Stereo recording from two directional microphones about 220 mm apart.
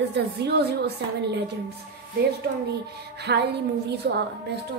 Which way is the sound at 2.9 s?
50° right (ahead or behind).